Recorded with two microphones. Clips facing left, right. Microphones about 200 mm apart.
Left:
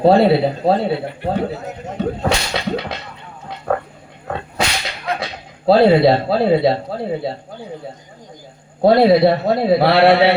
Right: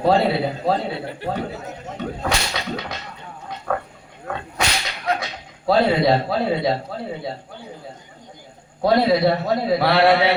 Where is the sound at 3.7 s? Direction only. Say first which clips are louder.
Left 5 dB; 35° left (ahead or behind).